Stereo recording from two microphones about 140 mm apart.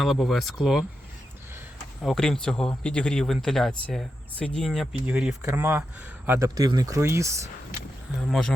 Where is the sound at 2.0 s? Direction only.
5° left (ahead or behind); by 6.5 s 15° right (ahead or behind).